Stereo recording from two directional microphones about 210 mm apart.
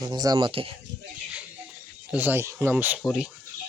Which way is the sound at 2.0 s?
10° right (ahead or behind).